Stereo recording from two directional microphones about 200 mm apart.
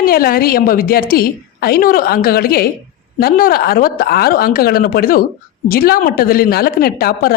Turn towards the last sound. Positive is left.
turn(degrees=50)  # may be behind; listen again after turning